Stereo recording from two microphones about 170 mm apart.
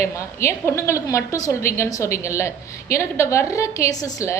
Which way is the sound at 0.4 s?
15° left (ahead or behind).